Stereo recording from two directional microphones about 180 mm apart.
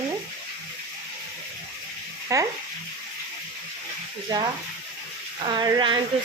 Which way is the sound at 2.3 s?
20° right (ahead or behind).